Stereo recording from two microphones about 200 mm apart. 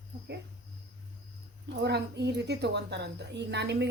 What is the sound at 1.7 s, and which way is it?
A woman's voice, 55° right (ahead or behind).